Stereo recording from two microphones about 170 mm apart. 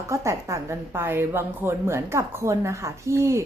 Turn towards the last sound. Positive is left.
turn(degrees=-15)  # may be behind; listen again after turning